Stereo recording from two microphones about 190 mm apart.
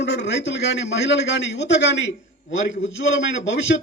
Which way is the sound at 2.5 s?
80° left.